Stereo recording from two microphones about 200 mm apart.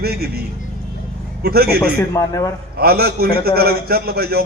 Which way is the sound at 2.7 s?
50° right (ahead or behind).